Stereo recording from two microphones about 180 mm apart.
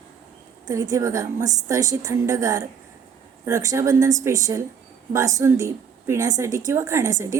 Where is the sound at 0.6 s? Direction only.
20° right (ahead or behind).